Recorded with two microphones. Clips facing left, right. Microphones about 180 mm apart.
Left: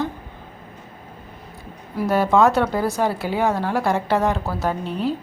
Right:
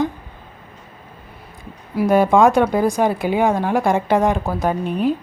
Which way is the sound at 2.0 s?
15° right (ahead or behind).